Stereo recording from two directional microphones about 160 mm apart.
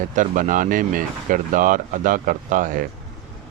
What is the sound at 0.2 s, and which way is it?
Speech, 55° right (ahead or behind).